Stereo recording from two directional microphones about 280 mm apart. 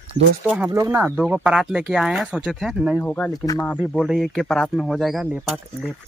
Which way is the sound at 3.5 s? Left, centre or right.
Centre.